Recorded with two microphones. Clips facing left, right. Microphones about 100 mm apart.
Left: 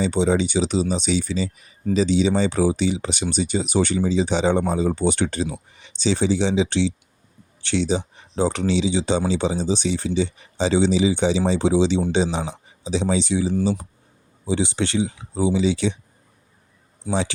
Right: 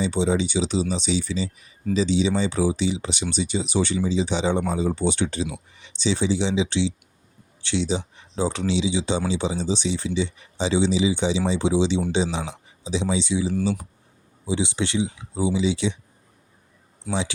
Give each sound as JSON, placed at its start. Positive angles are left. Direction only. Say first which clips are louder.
{"t": 0.0, "sound": "speech", "louder": "left 3 dB", "side_deg": 55}